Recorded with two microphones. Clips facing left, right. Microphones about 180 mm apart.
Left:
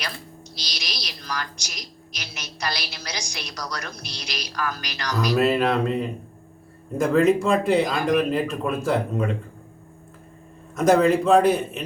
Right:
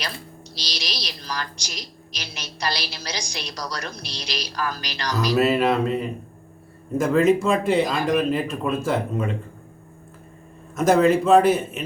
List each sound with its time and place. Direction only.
0.5 s a woman's voice: 30° right (ahead or behind)
5.1 s speech: 10° left (ahead or behind)
5.4 s speech: 5° right (ahead or behind)
10.8 s speech: centre (ahead or behind)